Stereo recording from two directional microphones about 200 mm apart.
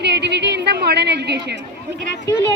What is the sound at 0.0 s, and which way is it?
A woman's voice, 60° right (ahead or behind).